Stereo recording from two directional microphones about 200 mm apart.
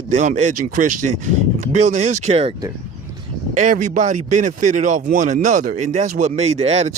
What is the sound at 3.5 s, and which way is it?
Speech, 40° right (ahead or behind).